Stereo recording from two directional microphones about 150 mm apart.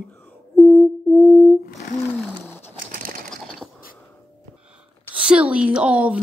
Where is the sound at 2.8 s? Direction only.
70° right (ahead or behind).